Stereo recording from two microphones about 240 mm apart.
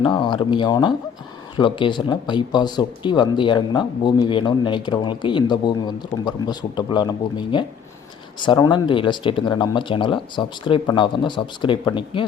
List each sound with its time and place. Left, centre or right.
0.0 s speech: centre